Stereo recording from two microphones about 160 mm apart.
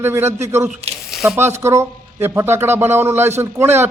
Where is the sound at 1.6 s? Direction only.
15° right (ahead or behind).